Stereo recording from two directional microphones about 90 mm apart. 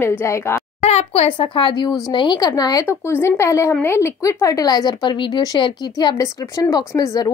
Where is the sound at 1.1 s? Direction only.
85° left; by 2.4 s 60° left (ahead or behind).